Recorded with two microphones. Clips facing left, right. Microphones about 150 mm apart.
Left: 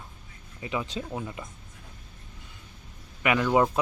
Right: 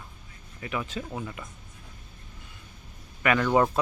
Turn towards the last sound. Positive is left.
turn(degrees=5)  # may be behind; listen again after turning